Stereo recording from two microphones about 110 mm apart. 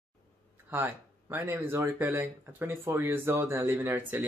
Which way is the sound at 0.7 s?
20° right (ahead or behind).